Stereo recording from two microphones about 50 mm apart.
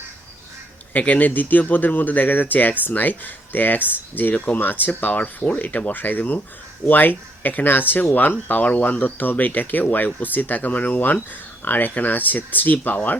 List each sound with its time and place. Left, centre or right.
0.9 s speech: left